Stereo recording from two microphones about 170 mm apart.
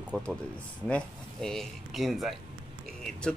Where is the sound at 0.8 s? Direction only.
5° left (ahead or behind).